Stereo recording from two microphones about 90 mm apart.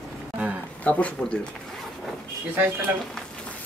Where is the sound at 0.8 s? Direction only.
15° left (ahead or behind).